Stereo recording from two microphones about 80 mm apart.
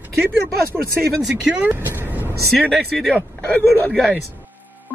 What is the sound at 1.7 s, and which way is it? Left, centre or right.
Vehicle, right.